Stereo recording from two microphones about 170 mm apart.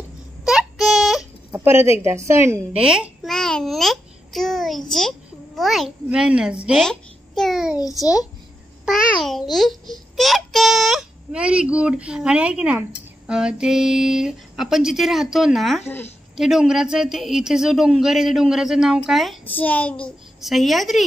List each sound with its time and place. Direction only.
0.5 s a sound: 5° right (ahead or behind)
1.5 s a child's voice: 15° right (ahead or behind)
8.0 s a child's voice: 20° left (ahead or behind)
8.8 s a child's voice: centre (ahead or behind)
19.4 s a child's voice: 10° left (ahead or behind)